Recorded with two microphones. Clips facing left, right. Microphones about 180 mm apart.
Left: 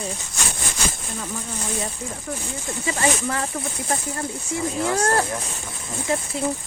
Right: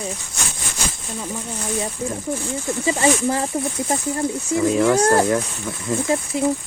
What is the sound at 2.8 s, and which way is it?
Speech, 25° right (ahead or behind).